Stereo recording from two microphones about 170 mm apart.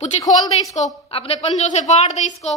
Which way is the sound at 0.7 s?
40° left (ahead or behind).